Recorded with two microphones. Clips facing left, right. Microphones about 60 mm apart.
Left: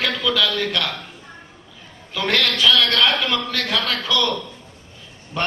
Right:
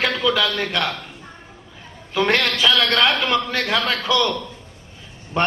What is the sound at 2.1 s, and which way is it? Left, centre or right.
A man's voice, right.